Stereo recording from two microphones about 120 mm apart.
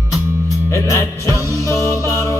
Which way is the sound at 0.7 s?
25° left (ahead or behind).